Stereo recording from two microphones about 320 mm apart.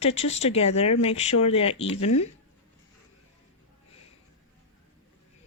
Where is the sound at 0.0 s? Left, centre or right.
Centre.